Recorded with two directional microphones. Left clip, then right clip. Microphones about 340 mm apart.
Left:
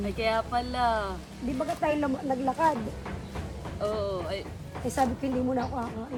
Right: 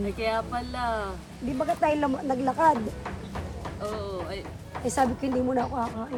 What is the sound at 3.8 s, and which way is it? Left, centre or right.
Speech, centre.